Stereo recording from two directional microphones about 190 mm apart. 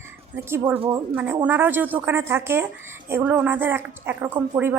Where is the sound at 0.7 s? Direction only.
25° right (ahead or behind).